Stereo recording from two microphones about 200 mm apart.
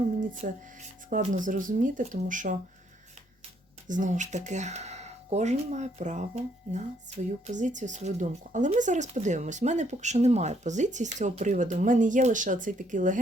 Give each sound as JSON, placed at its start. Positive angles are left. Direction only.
{"t": 0.4, "sound": "speech", "side_deg": -40}
{"t": 3.8, "sound": "speech", "side_deg": -40}